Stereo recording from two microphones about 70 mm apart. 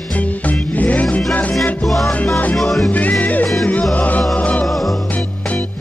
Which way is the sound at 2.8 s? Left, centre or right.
Left.